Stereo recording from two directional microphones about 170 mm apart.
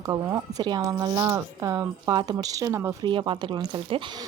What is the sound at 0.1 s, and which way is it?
Speech, 20° right (ahead or behind).